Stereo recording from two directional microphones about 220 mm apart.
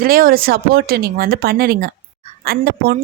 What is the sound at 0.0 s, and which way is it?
A woman's voice, 40° right (ahead or behind).